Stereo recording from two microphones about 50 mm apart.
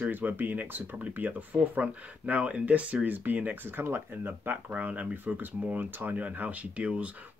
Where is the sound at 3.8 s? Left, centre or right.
Right.